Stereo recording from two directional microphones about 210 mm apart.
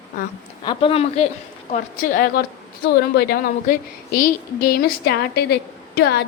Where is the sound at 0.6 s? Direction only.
25° left (ahead or behind).